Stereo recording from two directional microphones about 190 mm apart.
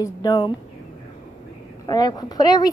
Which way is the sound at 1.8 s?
20° left (ahead or behind).